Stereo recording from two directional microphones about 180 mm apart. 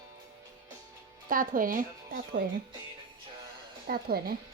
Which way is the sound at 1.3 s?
50° right (ahead or behind).